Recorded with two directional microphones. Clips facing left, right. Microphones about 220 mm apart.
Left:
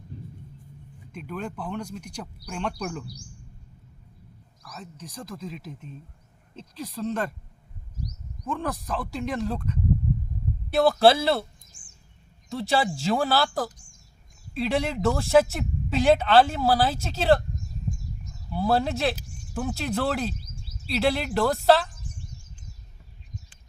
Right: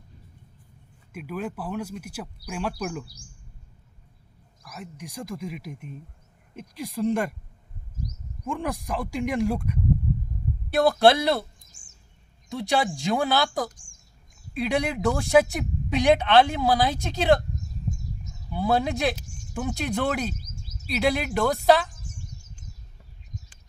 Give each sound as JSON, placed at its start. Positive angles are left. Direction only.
{"t": 1.1, "sound": "speech", "side_deg": -5}
{"t": 4.7, "sound": "speech", "side_deg": -15}
{"t": 8.4, "sound": "speech", "side_deg": -10}
{"t": 10.7, "sound": "speech", "side_deg": 0}
{"t": 12.5, "sound": "speech", "side_deg": 0}
{"t": 18.5, "sound": "speech", "side_deg": 0}
{"t": 20.3, "sound": "a sound", "side_deg": -45}
{"t": 20.9, "sound": "speech", "side_deg": 0}